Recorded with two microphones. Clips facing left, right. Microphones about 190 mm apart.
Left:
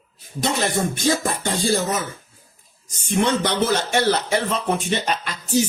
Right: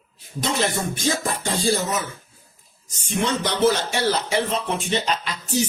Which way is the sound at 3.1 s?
60° left (ahead or behind).